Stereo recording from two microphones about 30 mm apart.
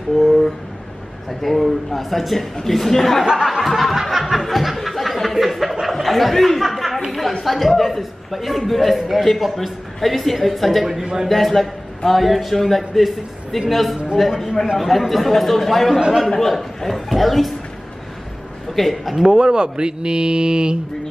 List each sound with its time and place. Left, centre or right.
0.1 s a sound: centre
1.4 s a man's voice: centre
3.4 s a sound: centre
7.4 s a man's voice: centre
18.7 s a man's voice: centre
19.2 s speech: right